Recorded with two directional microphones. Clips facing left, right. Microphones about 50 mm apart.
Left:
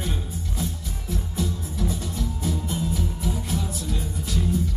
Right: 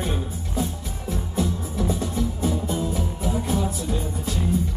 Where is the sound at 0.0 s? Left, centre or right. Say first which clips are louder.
Right 3 dB; right.